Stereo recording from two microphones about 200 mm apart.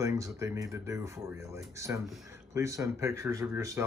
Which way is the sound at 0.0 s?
15° right (ahead or behind).